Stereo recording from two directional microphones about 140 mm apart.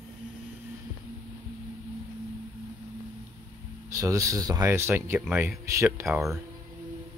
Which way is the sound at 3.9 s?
20° right (ahead or behind).